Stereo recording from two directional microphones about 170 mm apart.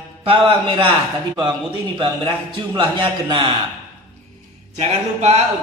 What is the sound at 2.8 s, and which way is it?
Speech, 25° right (ahead or behind).